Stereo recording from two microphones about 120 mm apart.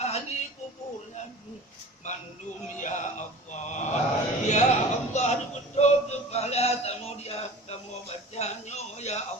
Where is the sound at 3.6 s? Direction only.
90° left.